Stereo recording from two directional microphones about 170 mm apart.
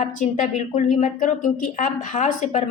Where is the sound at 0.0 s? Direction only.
45° left (ahead or behind).